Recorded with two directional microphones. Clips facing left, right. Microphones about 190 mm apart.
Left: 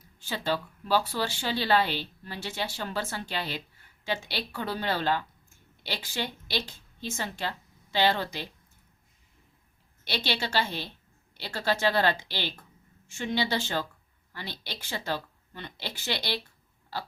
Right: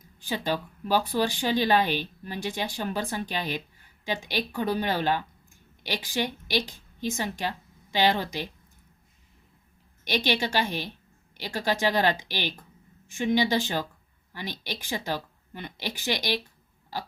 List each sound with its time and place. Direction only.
0.2 s a woman's voice: 15° right (ahead or behind)
10.2 s speech: 15° right (ahead or behind)